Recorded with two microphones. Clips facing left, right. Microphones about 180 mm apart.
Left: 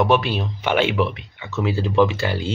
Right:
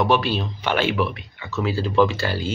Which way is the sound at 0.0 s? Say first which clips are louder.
Left 1 dB; 15° left (ahead or behind).